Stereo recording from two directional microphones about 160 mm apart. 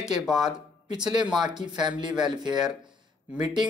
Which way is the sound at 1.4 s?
25° right (ahead or behind).